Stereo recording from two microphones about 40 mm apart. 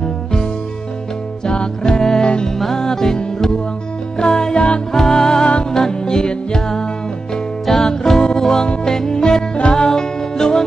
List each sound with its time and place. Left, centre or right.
0.0 s music: centre
4.2 s music: centre
4.6 s music: left
4.9 s music: centre
7.6 s music: centre